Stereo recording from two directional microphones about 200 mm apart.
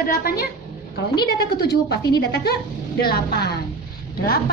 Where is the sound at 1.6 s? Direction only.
55° left (ahead or behind).